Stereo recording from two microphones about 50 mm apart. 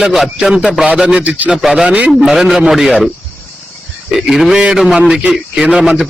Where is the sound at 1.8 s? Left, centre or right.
Right.